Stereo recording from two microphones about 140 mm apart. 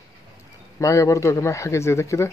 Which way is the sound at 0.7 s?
20° left (ahead or behind).